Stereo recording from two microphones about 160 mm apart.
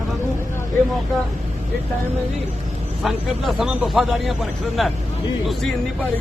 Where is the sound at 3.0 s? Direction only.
Centre (ahead or behind).